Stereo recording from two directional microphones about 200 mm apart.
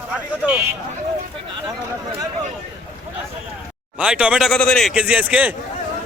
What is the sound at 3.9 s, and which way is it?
A man's voice, 5° right (ahead or behind).